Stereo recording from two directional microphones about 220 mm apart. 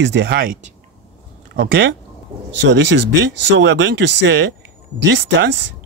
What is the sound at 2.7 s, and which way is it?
Speech, 55° right (ahead or behind).